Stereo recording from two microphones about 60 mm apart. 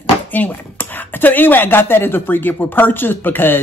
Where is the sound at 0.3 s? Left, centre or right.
Left.